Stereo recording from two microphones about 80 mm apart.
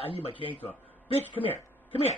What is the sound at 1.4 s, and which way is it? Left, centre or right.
Speech, left.